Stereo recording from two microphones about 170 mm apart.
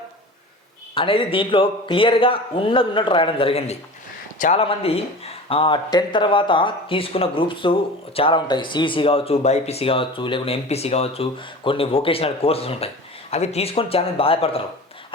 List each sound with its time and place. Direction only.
0.9 s speech: 30° left (ahead or behind)
4.4 s a man's voice: 45° left (ahead or behind)
4.6 s speech: 35° left (ahead or behind)